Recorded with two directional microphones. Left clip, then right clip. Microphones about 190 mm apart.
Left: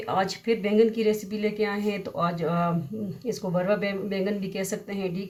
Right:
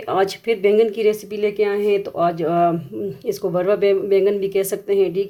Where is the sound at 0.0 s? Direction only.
45° right (ahead or behind).